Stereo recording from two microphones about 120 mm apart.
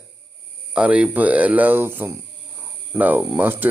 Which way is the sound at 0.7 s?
10° right (ahead or behind).